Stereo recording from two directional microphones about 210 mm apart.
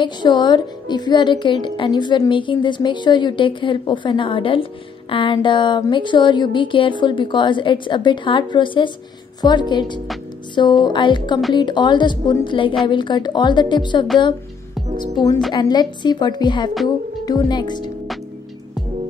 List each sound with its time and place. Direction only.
0.0 s speech: 20° left (ahead or behind)